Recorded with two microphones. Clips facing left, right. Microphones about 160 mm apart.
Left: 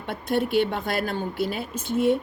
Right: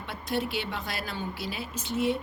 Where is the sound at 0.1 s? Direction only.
55° left (ahead or behind).